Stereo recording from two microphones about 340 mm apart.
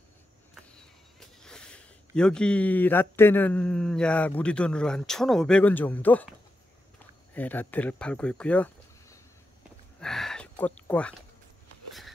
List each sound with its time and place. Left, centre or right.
1.4 s speech: centre
7.3 s speech: centre
9.9 s a sound: centre